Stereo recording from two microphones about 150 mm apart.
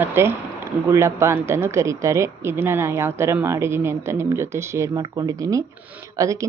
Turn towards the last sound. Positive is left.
turn(degrees=-20)  # may be behind; listen again after turning